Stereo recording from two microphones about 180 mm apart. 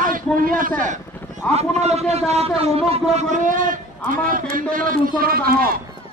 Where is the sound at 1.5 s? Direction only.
35° right (ahead or behind).